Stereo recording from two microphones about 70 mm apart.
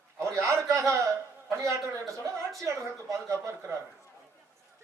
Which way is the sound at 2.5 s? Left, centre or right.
Right.